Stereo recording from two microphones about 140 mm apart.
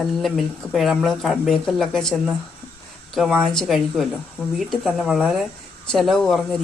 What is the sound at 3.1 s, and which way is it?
A woman's voice, centre (ahead or behind).